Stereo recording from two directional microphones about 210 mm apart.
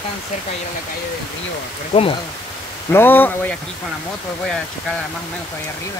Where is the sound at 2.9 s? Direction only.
10° left (ahead or behind).